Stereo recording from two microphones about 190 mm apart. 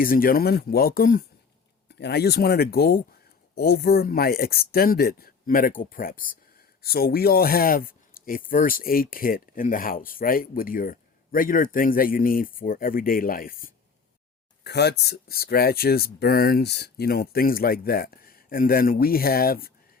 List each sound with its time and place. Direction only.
0.0 s speech: 50° left (ahead or behind)
1.9 s speech: 60° left (ahead or behind)
14.6 s speech: 60° left (ahead or behind)